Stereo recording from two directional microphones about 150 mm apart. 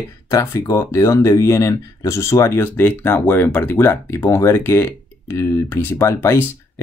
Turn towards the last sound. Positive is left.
turn(degrees=20)  # may be behind; listen again after turning